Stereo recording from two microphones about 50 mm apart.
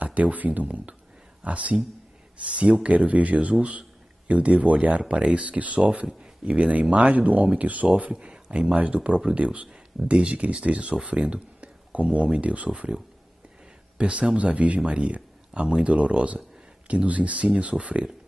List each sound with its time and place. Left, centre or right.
0.0 s speech: right